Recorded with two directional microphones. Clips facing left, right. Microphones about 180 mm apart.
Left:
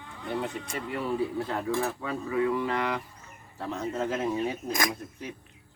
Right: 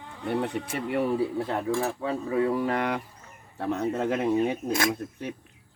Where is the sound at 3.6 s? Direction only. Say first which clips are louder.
Right 4 dB; 60° right (ahead or behind).